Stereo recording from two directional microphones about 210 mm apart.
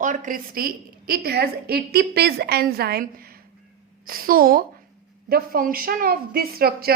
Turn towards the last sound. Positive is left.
turn(degrees=-45)  # may be behind; listen again after turning